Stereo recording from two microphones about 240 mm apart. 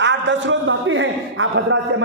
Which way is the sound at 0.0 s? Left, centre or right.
Right.